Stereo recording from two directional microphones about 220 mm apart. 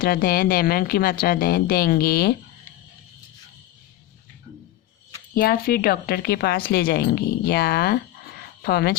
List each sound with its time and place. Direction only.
0.0 s a woman's voice: 40° left (ahead or behind)
5.3 s a woman's voice: 40° left (ahead or behind)